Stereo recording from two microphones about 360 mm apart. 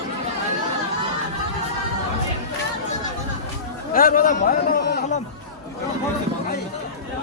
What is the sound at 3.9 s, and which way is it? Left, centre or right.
A man's voice, left.